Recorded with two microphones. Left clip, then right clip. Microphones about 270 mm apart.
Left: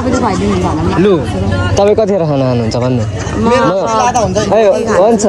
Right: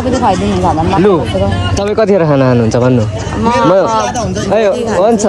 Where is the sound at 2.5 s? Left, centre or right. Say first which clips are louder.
Right 4 dB; right.